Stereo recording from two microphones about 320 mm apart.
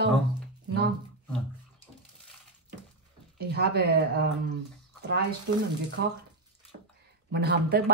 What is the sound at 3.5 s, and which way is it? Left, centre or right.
Speech, right.